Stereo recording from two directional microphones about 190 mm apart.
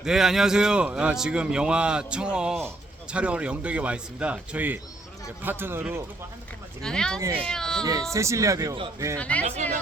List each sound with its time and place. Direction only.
0.0 s a man's voice: centre (ahead or behind)
6.8 s a man's voice: 5° left (ahead or behind)
8.1 s a man's voice: 15° right (ahead or behind)
9.1 s speech: 5° left (ahead or behind)